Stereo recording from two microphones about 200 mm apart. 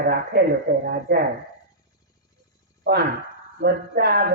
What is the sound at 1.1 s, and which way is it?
Speech, 55° right (ahead or behind).